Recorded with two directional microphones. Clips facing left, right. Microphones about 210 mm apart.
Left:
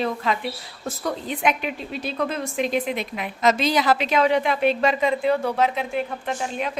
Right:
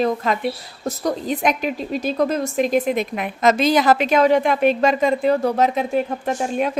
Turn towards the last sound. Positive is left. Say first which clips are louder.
# right 6 dB
turn(degrees=-45)  # may be behind; listen again after turning